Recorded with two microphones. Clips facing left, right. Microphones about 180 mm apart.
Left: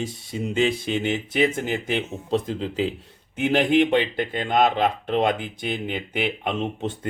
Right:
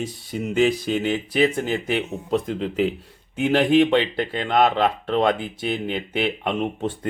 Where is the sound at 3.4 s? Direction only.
20° left (ahead or behind).